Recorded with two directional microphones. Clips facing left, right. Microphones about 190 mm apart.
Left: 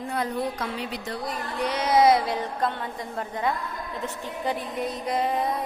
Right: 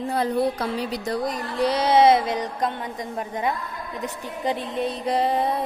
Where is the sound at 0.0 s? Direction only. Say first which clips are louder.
Right 5 dB; 35° right (ahead or behind); by 3.5 s 20° right (ahead or behind).